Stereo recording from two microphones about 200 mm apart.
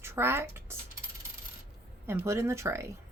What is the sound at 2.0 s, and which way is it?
Speech, 15° right (ahead or behind).